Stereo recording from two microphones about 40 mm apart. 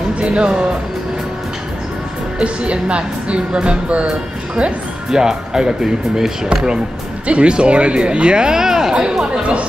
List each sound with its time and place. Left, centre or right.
0.2 s speech: right
2.3 s a woman's voice: right
5.1 s a woman's voice: centre